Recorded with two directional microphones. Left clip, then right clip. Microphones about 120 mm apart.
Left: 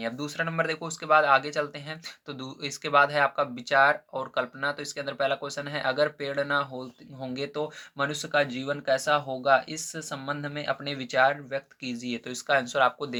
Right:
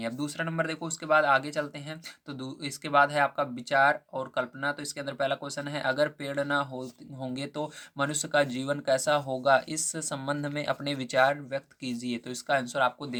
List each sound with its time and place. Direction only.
0.0 s speech: 30° right (ahead or behind)
12.5 s speech: 20° right (ahead or behind)